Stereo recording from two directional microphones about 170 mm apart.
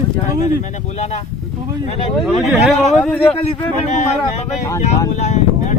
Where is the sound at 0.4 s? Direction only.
45° left (ahead or behind).